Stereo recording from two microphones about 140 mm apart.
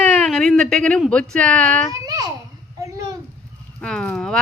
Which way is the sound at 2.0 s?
25° right (ahead or behind).